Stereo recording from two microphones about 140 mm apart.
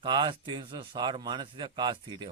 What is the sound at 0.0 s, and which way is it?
A man's voice, 35° right (ahead or behind).